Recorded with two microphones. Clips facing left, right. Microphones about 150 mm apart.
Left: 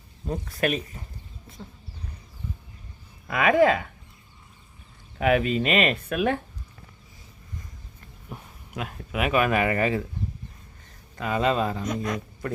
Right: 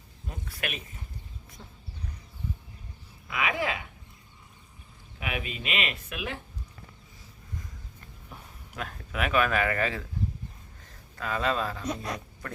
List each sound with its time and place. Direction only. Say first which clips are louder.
0.3 s speech: left 11 dB; 40° left (ahead or behind)
3.2 s speech: left 11 dB; 50° left (ahead or behind)
5.2 s speech: left 13 dB; 45° left (ahead or behind)
8.3 s speech: left 7 dB; 10° left (ahead or behind)
11.2 s speech: left 5 dB; 10° left (ahead or behind)
11.9 s speech: left 5 dB; 35° right (ahead or behind)